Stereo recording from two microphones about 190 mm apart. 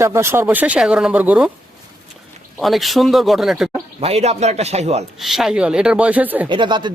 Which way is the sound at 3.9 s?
30° right (ahead or behind).